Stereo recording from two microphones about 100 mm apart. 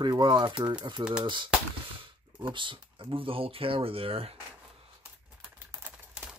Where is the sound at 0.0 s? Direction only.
50° right (ahead or behind); by 4.4 s 75° right (ahead or behind).